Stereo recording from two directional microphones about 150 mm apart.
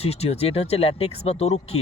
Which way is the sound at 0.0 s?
45° left (ahead or behind).